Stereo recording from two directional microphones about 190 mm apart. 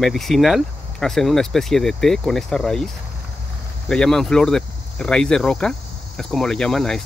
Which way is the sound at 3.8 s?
5° left (ahead or behind).